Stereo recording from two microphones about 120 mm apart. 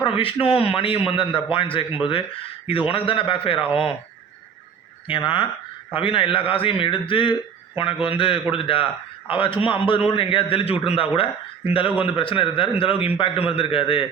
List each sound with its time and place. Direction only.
0.0 s a man's voice: 50° left (ahead or behind)
5.0 s a man's voice: 45° left (ahead or behind)